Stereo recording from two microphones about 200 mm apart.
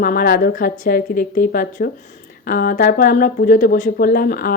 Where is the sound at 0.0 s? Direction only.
45° left (ahead or behind).